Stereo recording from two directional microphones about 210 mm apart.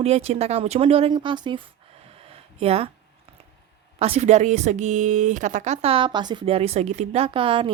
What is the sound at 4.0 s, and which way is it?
Speech, 30° right (ahead or behind).